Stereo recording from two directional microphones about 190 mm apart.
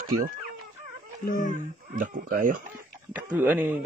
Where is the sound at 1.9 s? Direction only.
45° right (ahead or behind).